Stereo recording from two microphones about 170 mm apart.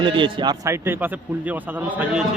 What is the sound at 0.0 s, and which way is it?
Speech, 25° right (ahead or behind).